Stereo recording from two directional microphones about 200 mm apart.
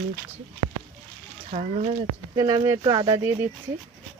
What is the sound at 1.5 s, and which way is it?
Speech, 35° right (ahead or behind).